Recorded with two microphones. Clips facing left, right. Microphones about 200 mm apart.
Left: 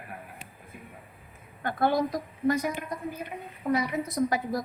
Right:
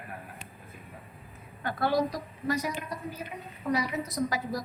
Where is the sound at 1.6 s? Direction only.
50° left (ahead or behind).